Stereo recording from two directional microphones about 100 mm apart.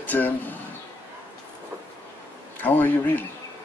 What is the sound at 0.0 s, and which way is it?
Speech, 15° left (ahead or behind).